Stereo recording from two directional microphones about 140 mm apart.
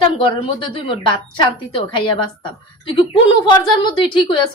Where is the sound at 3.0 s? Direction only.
35° left (ahead or behind).